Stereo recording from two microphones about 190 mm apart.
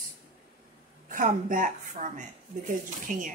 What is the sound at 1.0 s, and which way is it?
A woman's voice, 45° right (ahead or behind).